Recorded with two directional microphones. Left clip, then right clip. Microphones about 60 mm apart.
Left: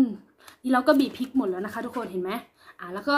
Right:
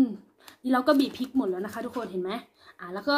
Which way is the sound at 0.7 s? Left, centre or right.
Left.